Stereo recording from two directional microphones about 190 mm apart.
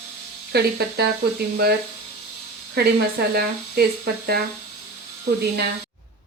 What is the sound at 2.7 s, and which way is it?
Speech, 55° right (ahead or behind).